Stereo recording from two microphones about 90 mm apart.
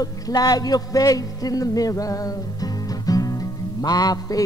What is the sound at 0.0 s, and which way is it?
A man's voice, 45° left (ahead or behind).